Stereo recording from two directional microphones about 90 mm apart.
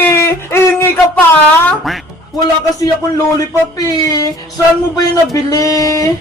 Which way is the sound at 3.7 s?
40° left (ahead or behind).